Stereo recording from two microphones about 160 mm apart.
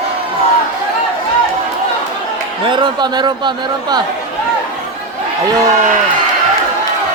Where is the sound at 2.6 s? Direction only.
30° right (ahead or behind).